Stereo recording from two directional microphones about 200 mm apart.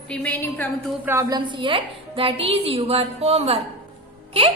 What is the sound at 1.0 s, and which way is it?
A woman's voice, 15° right (ahead or behind).